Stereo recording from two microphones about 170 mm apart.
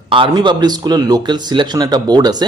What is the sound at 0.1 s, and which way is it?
A man's voice, 30° right (ahead or behind).